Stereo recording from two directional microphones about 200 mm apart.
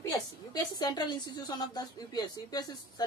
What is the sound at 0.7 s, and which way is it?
A woman's voice, 20° left (ahead or behind).